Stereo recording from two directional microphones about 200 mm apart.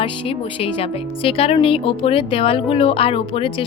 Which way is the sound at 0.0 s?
30° left (ahead or behind).